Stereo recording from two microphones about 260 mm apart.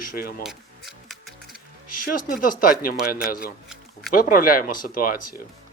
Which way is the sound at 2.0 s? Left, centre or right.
Left.